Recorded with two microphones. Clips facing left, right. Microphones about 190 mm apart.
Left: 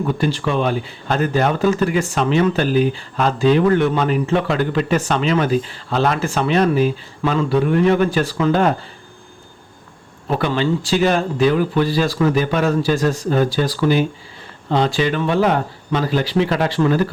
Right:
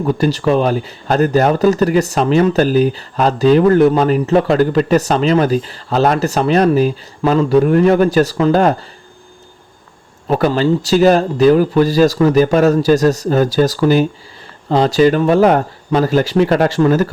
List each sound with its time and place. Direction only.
0.2 s speech: 40° right (ahead or behind)
10.2 s speech: 40° right (ahead or behind)